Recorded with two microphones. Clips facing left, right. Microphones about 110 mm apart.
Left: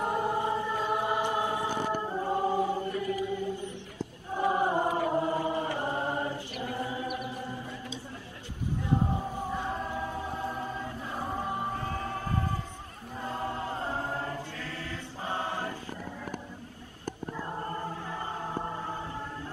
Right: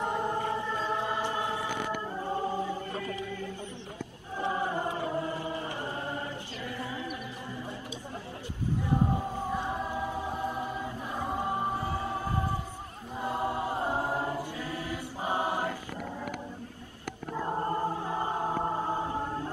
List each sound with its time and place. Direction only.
0.0 s choir: 10° left (ahead or behind)
3.3 s music: 20° left (ahead or behind)
4.4 s choir: 25° left (ahead or behind)
5.1 s chant: 25° left (ahead or behind)
8.8 s a sound: 15° right (ahead or behind)
9.5 s choir: 15° right (ahead or behind)
11.2 s music: 15° right (ahead or behind)
13.2 s choir: 15° right (ahead or behind)
17.5 s music: 25° right (ahead or behind)